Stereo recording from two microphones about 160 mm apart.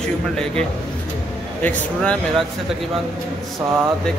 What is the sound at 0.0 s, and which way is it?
Speech, 5° left (ahead or behind).